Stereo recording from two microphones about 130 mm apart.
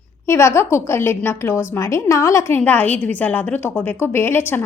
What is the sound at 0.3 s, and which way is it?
A woman's voice, 20° left (ahead or behind).